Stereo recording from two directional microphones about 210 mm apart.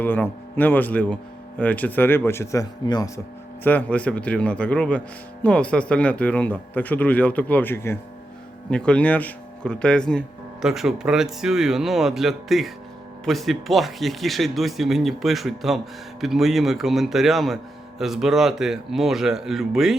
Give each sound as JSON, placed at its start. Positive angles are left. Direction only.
{"t": 0.0, "sound": "speech", "side_deg": 10}
{"t": 3.6, "sound": "speech", "side_deg": 10}